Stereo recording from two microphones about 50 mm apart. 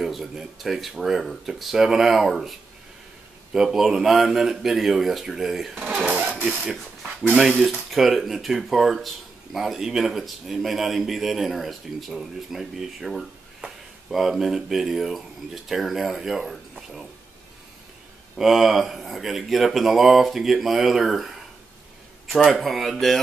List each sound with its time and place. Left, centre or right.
0.0 s speech: centre
3.5 s speech: centre
6.0 s a sound: centre
7.6 s speech: centre
18.4 s speech: centre
22.3 s speech: centre